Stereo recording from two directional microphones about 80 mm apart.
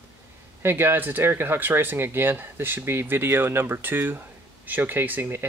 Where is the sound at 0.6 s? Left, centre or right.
Right.